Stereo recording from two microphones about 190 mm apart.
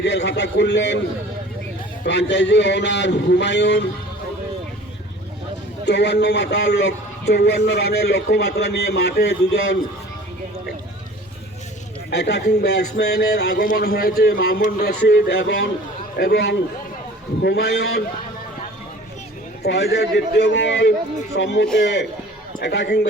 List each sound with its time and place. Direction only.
0.0 s speech: 65° left (ahead or behind)
2.0 s a man's voice: 65° left (ahead or behind)
5.8 s speech: 60° left (ahead or behind)
12.1 s speech: 60° left (ahead or behind)
19.6 s speech: 60° left (ahead or behind)